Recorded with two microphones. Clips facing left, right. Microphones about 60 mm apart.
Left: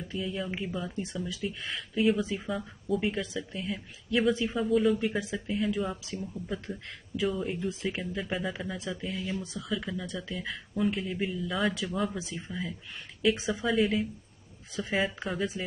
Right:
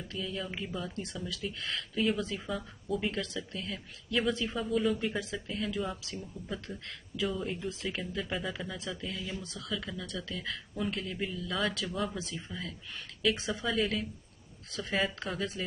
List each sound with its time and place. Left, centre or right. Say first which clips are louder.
0.1 s speech: left 4 dB; centre
9.7 s speech: left 3 dB; centre
10.0 s speech: left 2 dB; centre
11.7 s speech: left 3 dB; left